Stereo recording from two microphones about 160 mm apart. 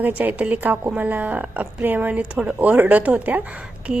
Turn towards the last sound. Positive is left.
turn(degrees=-5)  # may be behind; listen again after turning